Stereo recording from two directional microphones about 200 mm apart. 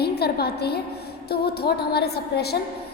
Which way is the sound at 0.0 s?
55° left (ahead or behind).